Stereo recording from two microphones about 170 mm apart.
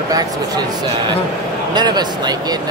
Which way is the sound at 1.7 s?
25° right (ahead or behind).